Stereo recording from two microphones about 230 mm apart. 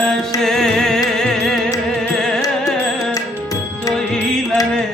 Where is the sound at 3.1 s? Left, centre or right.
Centre.